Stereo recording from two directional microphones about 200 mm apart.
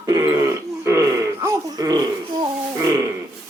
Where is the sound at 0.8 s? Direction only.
15° right (ahead or behind).